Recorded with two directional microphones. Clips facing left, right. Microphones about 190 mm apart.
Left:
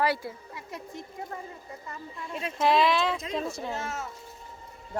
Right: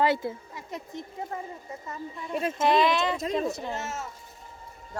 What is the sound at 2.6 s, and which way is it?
Speech, centre (ahead or behind).